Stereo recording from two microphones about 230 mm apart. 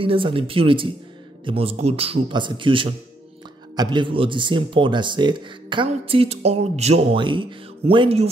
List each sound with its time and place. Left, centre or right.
0.0 s a man's voice: right